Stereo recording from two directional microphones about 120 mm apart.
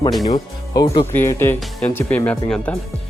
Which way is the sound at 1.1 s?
20° left (ahead or behind).